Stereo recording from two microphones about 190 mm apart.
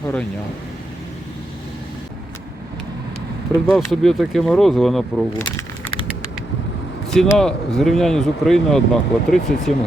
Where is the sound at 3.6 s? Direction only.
Centre (ahead or behind).